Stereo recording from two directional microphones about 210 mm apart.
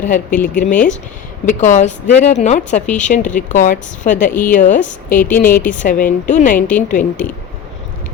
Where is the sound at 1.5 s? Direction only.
35° left (ahead or behind).